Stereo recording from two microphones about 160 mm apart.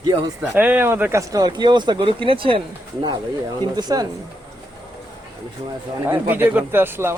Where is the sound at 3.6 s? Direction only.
25° right (ahead or behind).